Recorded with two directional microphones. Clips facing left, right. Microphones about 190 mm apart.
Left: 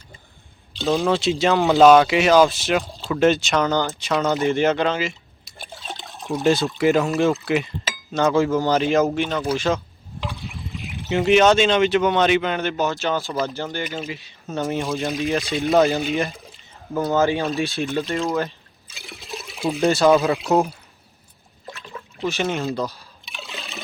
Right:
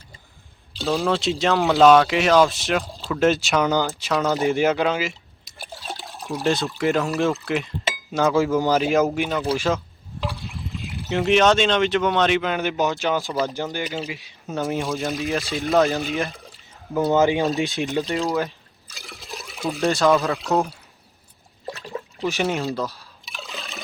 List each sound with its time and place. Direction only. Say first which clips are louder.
0.8 s speech: left 2 dB; centre (ahead or behind)
5.8 s water: right 1 dB; centre (ahead or behind)
6.7 s speech: left 3 dB; 5° left (ahead or behind)
9.6 s a sound: left 1 dB; 5° right (ahead or behind)
11.1 s speech: left 2 dB; centre (ahead or behind)
12.6 s speech: even; 15° right (ahead or behind)
17.1 s speech: right 1 dB; 15° right (ahead or behind)
18.2 s liquid: even; 5° right (ahead or behind)
20.2 s speech: left 3 dB; 15° left (ahead or behind)
21.7 s water: right 6 dB; 40° right (ahead or behind)
22.2 s speech: even; 15° right (ahead or behind)
22.6 s a sound: left 1 dB; centre (ahead or behind)